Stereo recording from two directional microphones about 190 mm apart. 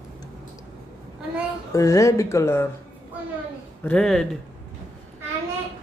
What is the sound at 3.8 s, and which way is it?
Speech, 5° left (ahead or behind).